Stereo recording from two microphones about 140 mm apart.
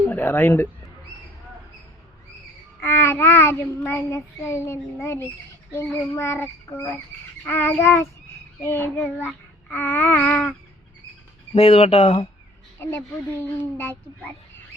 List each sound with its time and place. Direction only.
0.1 s speech: 15° left (ahead or behind)
2.8 s child singing: 15° left (ahead or behind)
11.5 s speech: 45° left (ahead or behind)
12.8 s speech: 15° left (ahead or behind)